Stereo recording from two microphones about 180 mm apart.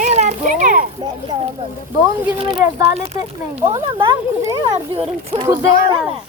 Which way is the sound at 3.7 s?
25° right (ahead or behind).